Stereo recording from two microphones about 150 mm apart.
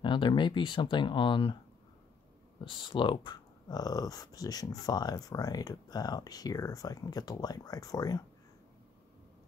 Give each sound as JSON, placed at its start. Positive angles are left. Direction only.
{"t": 0.0, "sound": "speech", "side_deg": 30}
{"t": 2.6, "sound": "speech", "side_deg": 35}